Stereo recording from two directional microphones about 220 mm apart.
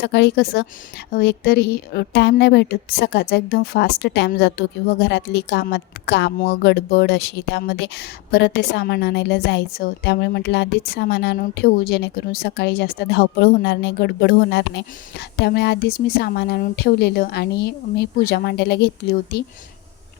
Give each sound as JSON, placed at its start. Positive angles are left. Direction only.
{"t": 0.0, "sound": "speech", "side_deg": 50}